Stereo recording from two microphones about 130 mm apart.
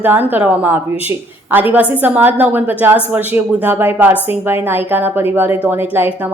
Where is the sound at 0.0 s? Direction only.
15° right (ahead or behind).